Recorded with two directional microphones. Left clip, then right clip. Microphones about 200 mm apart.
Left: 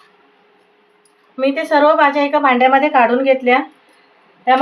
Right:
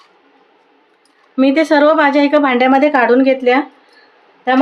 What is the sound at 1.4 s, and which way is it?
A woman's voice, 60° right (ahead or behind).